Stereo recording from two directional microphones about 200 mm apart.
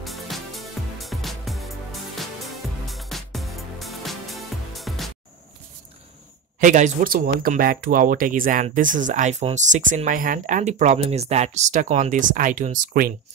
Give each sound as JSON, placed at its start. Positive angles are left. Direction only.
{"t": 0.0, "sound": "music", "side_deg": 0}
{"t": 6.6, "sound": "speech", "side_deg": -40}